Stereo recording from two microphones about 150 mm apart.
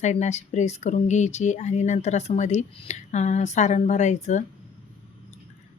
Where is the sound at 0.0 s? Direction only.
50° left (ahead or behind).